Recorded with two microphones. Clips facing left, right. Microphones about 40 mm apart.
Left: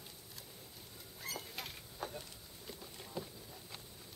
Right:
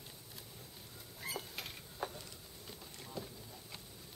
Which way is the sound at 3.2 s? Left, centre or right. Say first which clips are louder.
Left 1 dB; centre.